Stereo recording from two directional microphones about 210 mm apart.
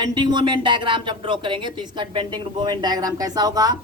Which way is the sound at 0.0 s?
20° right (ahead or behind).